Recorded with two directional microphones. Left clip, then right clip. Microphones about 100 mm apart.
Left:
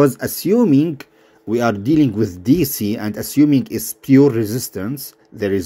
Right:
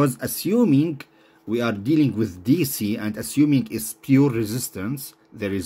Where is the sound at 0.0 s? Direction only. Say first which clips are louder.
Left 7 dB; 35° left (ahead or behind).